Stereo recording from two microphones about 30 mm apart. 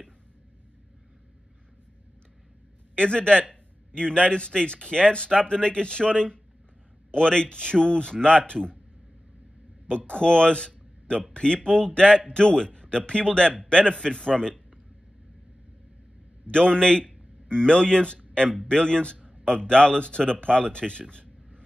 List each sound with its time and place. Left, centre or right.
3.0 s a man's voice: left
9.8 s a man's voice: left
16.5 s a man's voice: left